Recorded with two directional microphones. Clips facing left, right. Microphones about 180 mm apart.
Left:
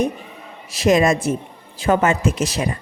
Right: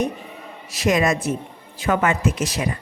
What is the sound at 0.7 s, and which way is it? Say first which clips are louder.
A woman's voice: left 4 dB; 30° left (ahead or behind).